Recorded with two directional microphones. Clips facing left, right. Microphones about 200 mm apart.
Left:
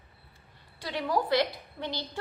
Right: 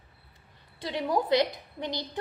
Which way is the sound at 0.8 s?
20° right (ahead or behind).